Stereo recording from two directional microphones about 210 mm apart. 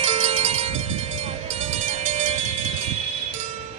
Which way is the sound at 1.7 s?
35° right (ahead or behind).